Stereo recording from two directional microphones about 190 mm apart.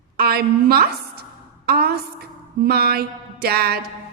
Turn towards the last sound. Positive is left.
turn(degrees=-55)  # may be behind; listen again after turning